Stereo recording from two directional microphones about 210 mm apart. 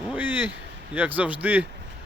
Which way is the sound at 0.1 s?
10° right (ahead or behind).